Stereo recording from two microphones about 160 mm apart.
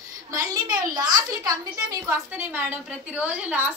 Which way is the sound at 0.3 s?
20° right (ahead or behind).